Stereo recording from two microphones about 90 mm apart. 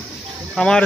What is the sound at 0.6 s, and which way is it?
Speech, 10° left (ahead or behind).